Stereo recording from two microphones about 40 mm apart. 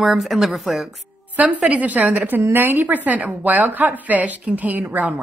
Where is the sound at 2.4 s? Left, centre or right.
Right.